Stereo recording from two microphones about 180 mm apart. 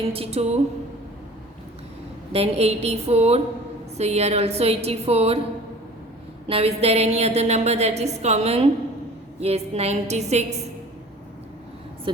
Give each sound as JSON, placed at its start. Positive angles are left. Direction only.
{"t": 0.0, "sound": "a woman's voice", "side_deg": -30}
{"t": 2.3, "sound": "a woman's voice", "side_deg": -35}
{"t": 6.5, "sound": "a woman's voice", "side_deg": -35}
{"t": 12.1, "sound": "a woman's voice", "side_deg": -30}